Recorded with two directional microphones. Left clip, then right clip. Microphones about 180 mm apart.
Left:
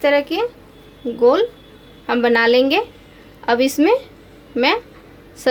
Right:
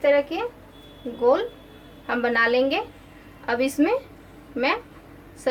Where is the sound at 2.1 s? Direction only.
55° left (ahead or behind).